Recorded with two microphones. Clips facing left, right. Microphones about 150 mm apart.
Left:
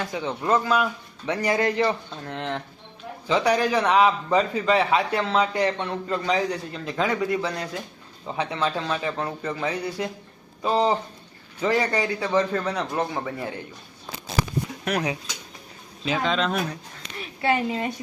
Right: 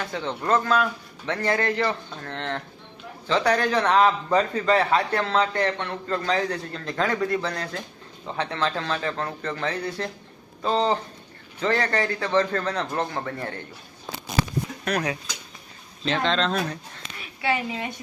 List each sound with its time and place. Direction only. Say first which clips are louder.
0.0 s a man's voice: left 1 dB; 10° left (ahead or behind)
14.8 s a woman's voice: even; 20° left (ahead or behind)
16.0 s a man's voice: even; 5° left (ahead or behind)
17.5 s a woman's voice: left 3 dB; 30° left (ahead or behind)